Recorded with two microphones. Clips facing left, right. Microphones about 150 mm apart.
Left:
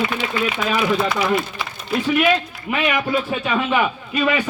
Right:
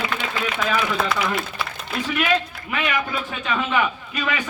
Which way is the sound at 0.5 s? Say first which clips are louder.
Left 2 dB; 5° left (ahead or behind).